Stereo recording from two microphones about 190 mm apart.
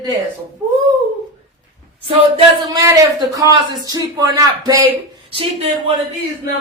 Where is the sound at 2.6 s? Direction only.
20° right (ahead or behind).